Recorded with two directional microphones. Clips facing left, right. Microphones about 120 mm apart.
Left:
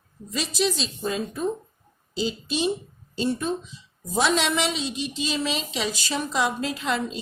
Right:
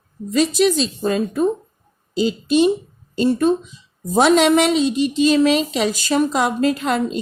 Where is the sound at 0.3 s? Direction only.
55° right (ahead or behind).